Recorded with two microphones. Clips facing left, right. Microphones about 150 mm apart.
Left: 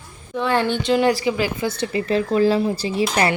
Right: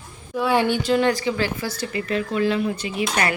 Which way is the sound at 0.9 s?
10° left (ahead or behind).